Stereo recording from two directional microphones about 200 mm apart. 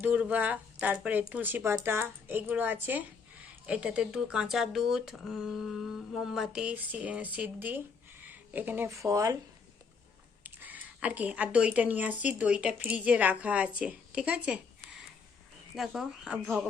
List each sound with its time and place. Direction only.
0.0 s speech: 10° right (ahead or behind)
10.4 s speech: 10° right (ahead or behind)